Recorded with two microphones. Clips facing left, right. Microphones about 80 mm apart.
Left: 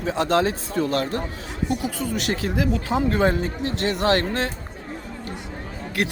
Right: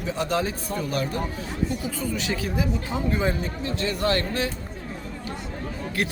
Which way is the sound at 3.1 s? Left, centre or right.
Left.